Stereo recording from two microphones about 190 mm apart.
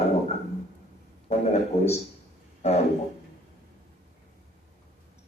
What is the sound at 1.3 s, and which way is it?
Speech, 35° left (ahead or behind).